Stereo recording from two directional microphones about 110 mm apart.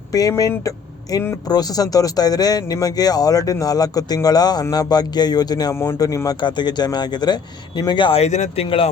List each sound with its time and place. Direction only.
0.1 s speech: 30° left (ahead or behind)
5.7 s speech: 25° left (ahead or behind); by 8.2 s 50° left (ahead or behind)
8.2 s speech: 80° left